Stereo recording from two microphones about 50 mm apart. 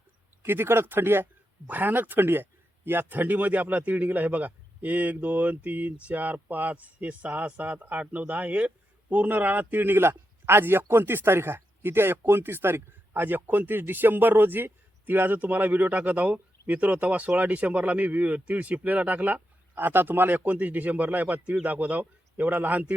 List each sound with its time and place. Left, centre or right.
0.4 s speech: right
1.6 s speech: right